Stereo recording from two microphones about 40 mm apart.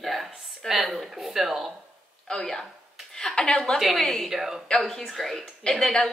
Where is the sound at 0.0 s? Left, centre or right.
Centre.